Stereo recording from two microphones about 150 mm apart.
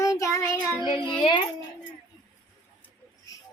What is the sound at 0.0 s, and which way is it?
Child singing, 20° left (ahead or behind).